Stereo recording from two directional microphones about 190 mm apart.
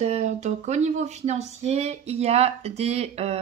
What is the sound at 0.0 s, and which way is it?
Speech, 35° right (ahead or behind).